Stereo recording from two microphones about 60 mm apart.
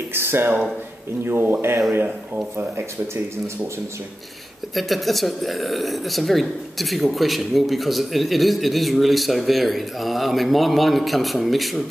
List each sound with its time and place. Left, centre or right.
0.1 s speech: right
4.7 s speech: centre